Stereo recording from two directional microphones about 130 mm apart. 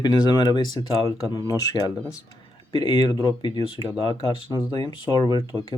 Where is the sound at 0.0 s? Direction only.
35° left (ahead or behind).